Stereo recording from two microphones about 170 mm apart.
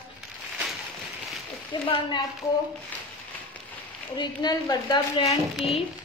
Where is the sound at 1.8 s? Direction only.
30° left (ahead or behind).